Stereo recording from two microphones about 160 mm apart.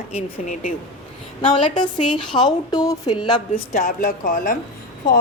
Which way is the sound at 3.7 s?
55° left (ahead or behind).